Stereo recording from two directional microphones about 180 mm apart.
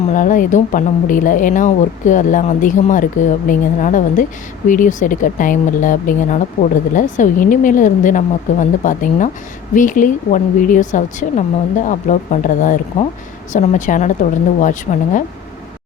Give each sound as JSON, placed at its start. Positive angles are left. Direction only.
{"t": 0.1, "sound": "a woman's voice", "side_deg": 45}